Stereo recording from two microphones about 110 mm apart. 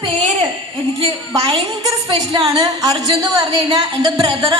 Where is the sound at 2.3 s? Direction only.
45° right (ahead or behind).